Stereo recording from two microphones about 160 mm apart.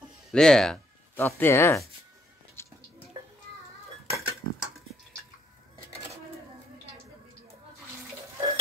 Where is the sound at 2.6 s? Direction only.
15° left (ahead or behind).